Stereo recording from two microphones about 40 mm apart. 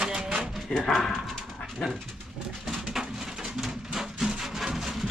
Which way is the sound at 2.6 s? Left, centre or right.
Centre.